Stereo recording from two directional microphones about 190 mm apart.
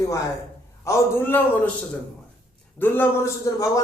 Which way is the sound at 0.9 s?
15° left (ahead or behind).